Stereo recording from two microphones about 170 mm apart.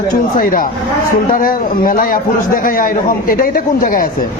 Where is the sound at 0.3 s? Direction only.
55° left (ahead or behind).